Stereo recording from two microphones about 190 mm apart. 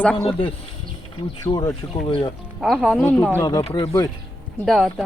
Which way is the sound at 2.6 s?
Centre (ahead or behind).